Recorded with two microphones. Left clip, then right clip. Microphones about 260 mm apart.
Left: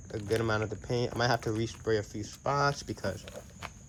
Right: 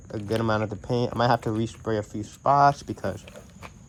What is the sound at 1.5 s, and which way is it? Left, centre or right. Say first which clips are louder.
Speech: right 5 dB; right.